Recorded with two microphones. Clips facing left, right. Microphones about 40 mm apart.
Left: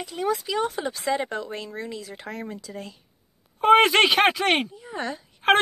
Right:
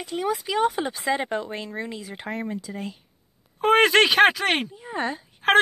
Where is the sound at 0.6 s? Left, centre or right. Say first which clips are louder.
Right 3 dB; right.